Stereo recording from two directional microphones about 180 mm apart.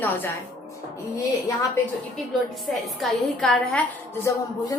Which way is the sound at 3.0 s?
Centre (ahead or behind).